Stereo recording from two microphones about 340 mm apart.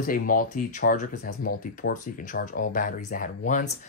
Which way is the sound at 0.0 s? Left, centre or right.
Left.